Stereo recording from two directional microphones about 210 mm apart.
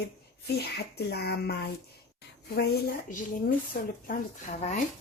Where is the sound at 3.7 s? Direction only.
45° left (ahead or behind).